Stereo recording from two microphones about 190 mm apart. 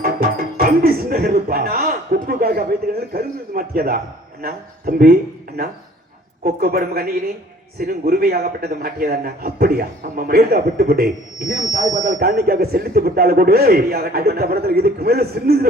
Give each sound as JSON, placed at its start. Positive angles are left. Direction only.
{"t": 0.0, "sound": "music", "side_deg": -50}
{"t": 3.1, "sound": "a man's voice", "side_deg": -50}
{"t": 6.4, "sound": "a man's voice", "side_deg": -55}